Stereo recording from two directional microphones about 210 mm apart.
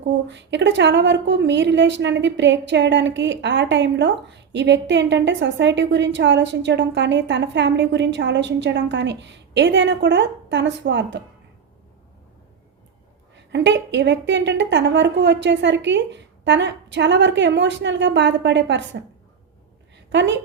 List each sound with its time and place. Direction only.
0.3 s a woman's voice: 60° right (ahead or behind)
13.3 s a woman's voice: 55° right (ahead or behind)
20.1 s a woman's voice: 55° right (ahead or behind)